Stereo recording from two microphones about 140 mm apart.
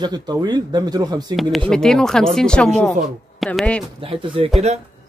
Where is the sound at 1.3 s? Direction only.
Centre (ahead or behind).